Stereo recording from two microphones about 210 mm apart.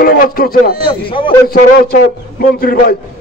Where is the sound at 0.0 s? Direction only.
45° left (ahead or behind).